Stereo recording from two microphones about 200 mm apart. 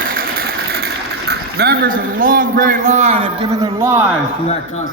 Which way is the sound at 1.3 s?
50° right (ahead or behind).